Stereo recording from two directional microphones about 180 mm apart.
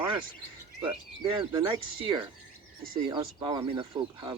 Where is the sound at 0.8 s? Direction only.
25° right (ahead or behind).